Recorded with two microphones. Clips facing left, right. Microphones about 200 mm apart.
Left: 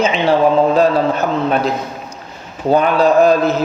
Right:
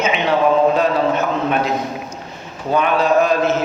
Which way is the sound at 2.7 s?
35° left (ahead or behind).